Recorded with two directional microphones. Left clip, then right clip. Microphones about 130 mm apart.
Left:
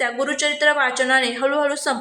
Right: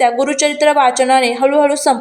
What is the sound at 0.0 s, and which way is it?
A woman's voice, 25° right (ahead or behind).